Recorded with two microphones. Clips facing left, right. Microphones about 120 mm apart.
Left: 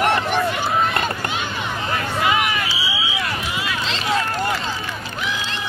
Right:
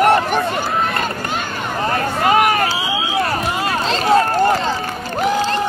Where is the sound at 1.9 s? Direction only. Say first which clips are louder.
Right 5 dB; 45° right (ahead or behind).